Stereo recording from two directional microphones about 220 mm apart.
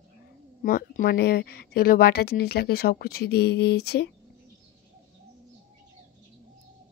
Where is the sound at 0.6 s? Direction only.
40° left (ahead or behind).